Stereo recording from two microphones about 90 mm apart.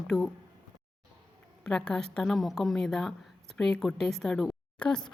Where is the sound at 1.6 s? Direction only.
10° left (ahead or behind).